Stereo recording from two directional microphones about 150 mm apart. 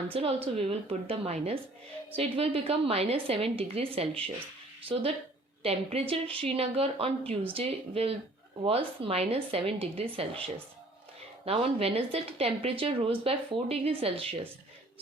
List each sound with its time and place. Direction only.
0.1 s speech: 40° right (ahead or behind)
5.6 s speech: 40° right (ahead or behind)